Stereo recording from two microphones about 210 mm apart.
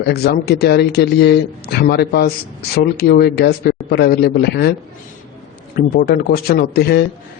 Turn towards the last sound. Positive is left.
turn(degrees=50)  # may be behind; listen again after turning